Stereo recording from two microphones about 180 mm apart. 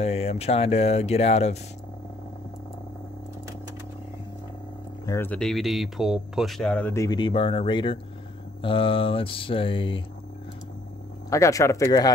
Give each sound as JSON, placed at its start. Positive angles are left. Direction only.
{"t": 0.0, "sound": "speech", "side_deg": 35}
{"t": 5.0, "sound": "speech", "side_deg": 15}
{"t": 8.6, "sound": "mantra", "side_deg": 30}
{"t": 11.2, "sound": "speech", "side_deg": 15}